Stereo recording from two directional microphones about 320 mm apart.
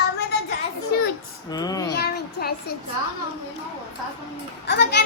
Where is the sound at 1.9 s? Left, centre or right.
Left.